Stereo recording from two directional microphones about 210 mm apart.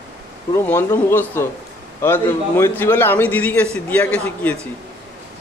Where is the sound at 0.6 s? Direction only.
10° left (ahead or behind).